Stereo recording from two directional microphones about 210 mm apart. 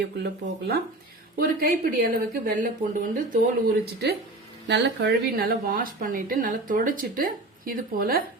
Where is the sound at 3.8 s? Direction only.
50° right (ahead or behind).